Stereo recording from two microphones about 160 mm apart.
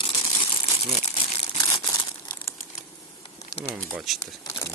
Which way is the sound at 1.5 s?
20° left (ahead or behind).